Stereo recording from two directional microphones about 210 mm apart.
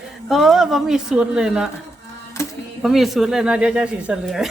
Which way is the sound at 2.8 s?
Centre (ahead or behind).